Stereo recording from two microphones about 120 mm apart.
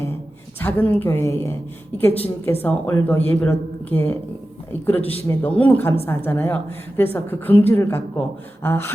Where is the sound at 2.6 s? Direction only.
15° left (ahead or behind).